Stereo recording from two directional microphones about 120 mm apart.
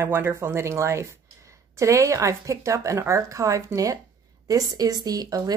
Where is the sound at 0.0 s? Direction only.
20° right (ahead or behind).